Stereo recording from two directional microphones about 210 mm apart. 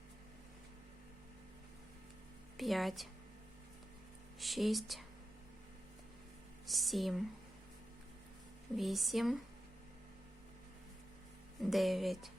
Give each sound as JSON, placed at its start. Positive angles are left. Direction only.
{"t": 2.6, "sound": "speech", "side_deg": 0}
{"t": 4.4, "sound": "speech", "side_deg": 0}
{"t": 6.7, "sound": "speech", "side_deg": 0}
{"t": 8.7, "sound": "speech", "side_deg": 0}
{"t": 11.6, "sound": "speech", "side_deg": 0}